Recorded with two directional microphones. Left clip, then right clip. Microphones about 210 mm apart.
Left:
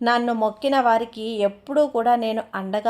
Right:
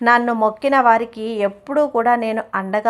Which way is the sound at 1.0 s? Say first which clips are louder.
Right 4 dB; 35° right (ahead or behind).